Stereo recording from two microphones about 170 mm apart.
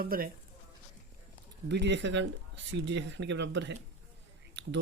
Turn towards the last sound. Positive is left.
turn(degrees=-90)